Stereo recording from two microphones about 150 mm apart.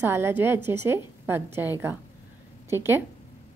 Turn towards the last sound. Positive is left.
turn(degrees=-15)  # may be behind; listen again after turning